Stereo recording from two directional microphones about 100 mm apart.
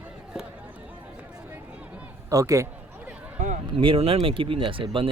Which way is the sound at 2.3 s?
35° right (ahead or behind).